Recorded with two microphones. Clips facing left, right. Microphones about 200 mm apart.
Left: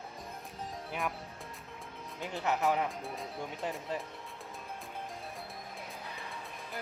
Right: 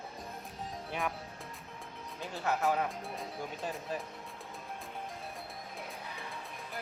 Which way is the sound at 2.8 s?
Centre (ahead or behind).